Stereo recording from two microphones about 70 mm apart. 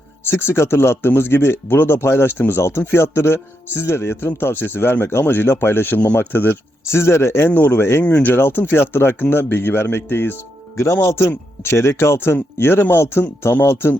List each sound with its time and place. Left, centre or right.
0.3 s speech: left
8.0 s speech: left